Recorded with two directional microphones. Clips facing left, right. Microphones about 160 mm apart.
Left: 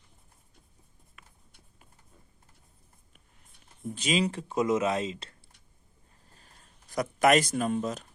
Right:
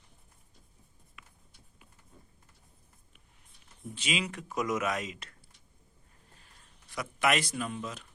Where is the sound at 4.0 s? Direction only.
40° left (ahead or behind).